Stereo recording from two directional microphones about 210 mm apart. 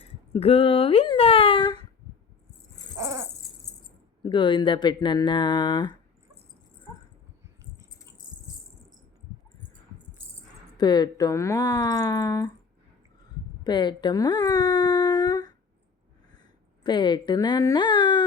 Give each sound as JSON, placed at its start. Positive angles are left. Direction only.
{"t": 0.0, "sound": "a sound", "side_deg": 30}
{"t": 3.0, "sound": "dog", "side_deg": -15}
{"t": 4.2, "sound": "speech", "side_deg": 20}
{"t": 10.8, "sound": "speech", "side_deg": 20}
{"t": 13.7, "sound": "speech", "side_deg": 20}
{"t": 16.8, "sound": "speech", "side_deg": 20}